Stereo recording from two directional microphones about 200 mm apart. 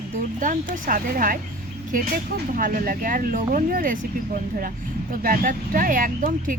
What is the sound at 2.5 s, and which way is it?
Speech, 45° right (ahead or behind).